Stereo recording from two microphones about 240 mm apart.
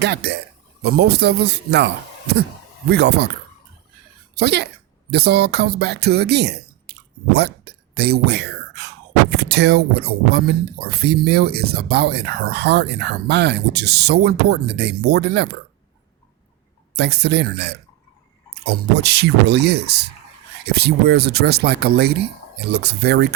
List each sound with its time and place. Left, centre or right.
0.0 s speech: right
4.4 s speech: right
16.9 s speech: right